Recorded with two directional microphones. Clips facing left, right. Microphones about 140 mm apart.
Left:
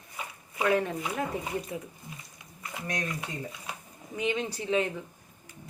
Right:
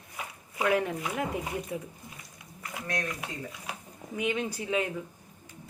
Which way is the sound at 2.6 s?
15° left (ahead or behind).